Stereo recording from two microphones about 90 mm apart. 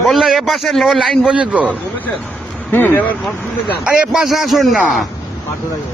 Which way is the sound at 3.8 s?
10° right (ahead or behind).